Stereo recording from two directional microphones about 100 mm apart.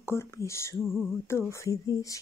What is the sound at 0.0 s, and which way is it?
Speech, 25° left (ahead or behind).